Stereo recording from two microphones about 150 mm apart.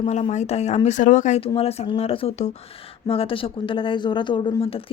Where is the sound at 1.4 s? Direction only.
40° left (ahead or behind).